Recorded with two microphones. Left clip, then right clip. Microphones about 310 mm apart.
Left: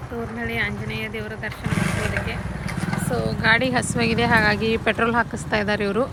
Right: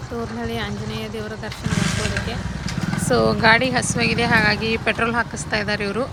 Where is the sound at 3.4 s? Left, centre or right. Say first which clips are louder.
Left 2 dB; centre.